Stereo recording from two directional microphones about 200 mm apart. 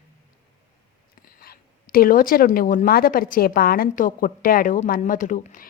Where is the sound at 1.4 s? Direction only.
45° left (ahead or behind).